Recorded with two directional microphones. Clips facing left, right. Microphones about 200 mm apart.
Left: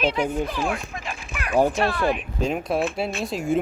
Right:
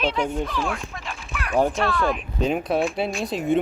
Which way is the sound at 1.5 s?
Centre (ahead or behind).